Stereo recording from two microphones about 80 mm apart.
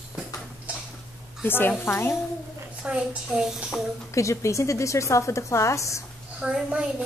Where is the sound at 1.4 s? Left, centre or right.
Left.